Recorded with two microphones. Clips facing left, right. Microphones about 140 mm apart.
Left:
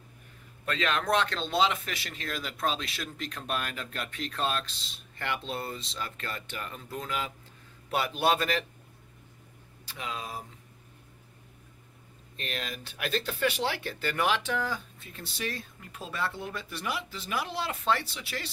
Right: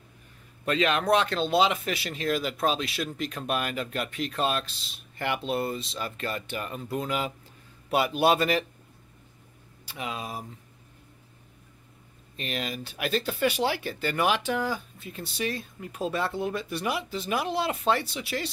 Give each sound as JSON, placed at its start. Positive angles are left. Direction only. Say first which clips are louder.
{"t": 0.7, "sound": "speech", "louder": "right 5 dB", "side_deg": -15}
{"t": 9.9, "sound": "speech", "louder": "right 3 dB", "side_deg": -15}
{"t": 12.4, "sound": "speech", "louder": "right 5 dB", "side_deg": -10}